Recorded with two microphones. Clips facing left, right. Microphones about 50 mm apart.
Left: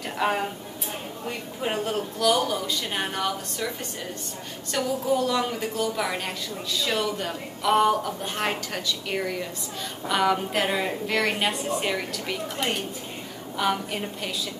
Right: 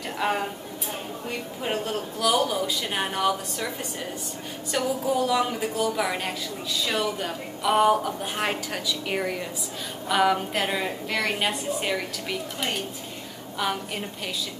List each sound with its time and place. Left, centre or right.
0.2 s a woman's voice: centre
1.6 s a woman's voice: centre
4.7 s a woman's voice: centre
13.6 s a woman's voice: centre